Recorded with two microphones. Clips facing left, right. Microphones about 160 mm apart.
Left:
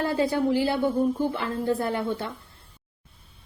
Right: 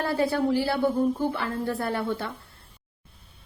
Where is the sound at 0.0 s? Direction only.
15° left (ahead or behind).